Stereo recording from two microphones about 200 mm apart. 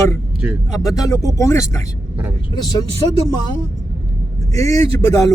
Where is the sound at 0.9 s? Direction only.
15° left (ahead or behind).